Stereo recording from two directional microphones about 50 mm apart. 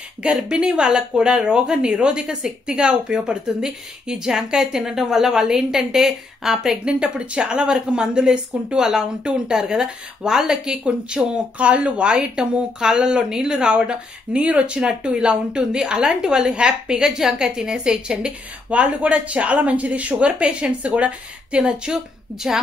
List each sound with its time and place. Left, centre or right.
0.2 s speech: right
1.9 s speech: right
2.1 s speech: centre
6.9 s speech: right